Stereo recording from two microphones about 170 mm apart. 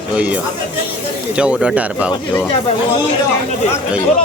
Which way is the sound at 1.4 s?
5° right (ahead or behind).